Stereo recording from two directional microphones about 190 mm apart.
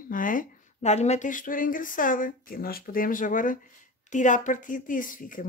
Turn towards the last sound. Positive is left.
turn(degrees=45)  # may be behind; listen again after turning